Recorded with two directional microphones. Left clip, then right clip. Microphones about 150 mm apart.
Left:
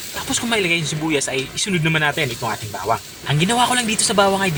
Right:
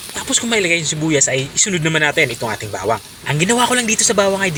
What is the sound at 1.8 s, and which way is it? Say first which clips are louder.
Speech: right 4 dB; 30° right (ahead or behind).